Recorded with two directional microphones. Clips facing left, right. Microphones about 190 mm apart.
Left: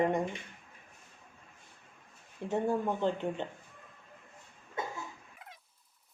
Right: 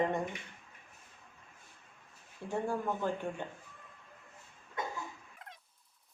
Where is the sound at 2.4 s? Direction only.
20° left (ahead or behind).